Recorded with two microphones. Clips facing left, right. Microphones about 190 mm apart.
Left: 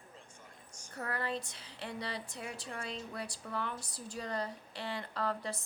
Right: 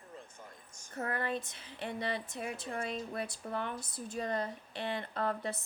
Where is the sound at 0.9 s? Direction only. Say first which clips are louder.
Right 2 dB; 20° right (ahead or behind).